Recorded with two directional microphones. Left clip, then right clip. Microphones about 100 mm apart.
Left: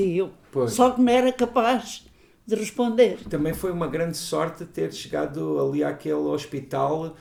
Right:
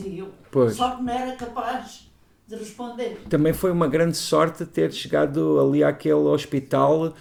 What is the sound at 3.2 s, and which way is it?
Speech, 25° right (ahead or behind).